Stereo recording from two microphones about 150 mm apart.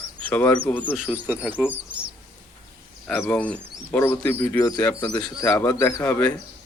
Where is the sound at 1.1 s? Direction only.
10° right (ahead or behind).